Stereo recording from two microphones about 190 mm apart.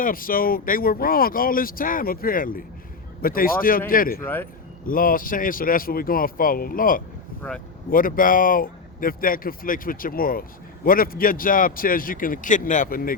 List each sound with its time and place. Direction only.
0.0 s speech: 50° left (ahead or behind)